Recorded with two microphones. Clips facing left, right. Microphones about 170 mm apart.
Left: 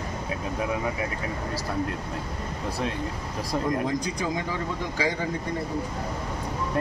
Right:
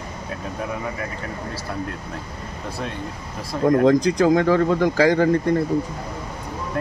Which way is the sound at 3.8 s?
90° right.